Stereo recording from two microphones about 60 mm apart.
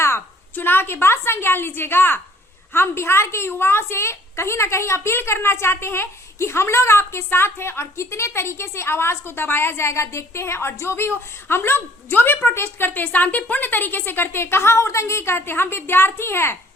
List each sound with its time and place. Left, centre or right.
0.5 s a woman's voice: left